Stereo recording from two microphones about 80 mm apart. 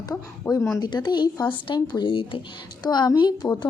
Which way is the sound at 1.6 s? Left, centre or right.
Left.